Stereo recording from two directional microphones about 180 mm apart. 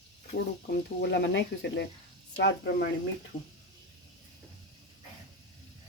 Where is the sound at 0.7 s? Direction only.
70° left (ahead or behind).